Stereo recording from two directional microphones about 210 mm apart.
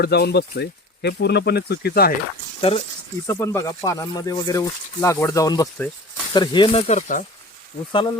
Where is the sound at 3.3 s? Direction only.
10° left (ahead or behind); by 7.2 s 35° left (ahead or behind).